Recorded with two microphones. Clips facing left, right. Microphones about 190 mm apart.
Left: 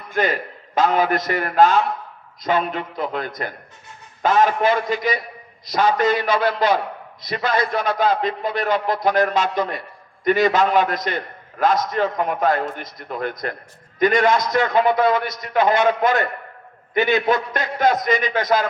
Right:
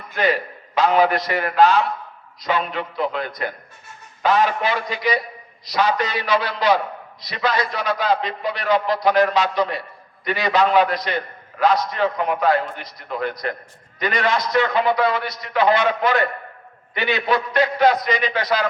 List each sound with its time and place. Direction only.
0.1 s a man's voice: 45° left (ahead or behind)